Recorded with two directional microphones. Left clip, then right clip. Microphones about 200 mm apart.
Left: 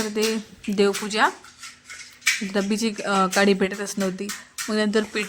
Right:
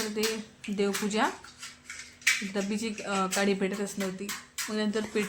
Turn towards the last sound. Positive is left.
turn(degrees=45)  # may be behind; listen again after turning